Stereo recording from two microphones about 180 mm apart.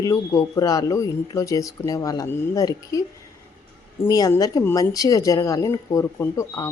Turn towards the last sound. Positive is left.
turn(degrees=15)  # may be behind; listen again after turning